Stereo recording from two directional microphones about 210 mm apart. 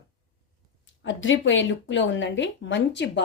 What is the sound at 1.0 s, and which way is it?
Speech, 65° left (ahead or behind).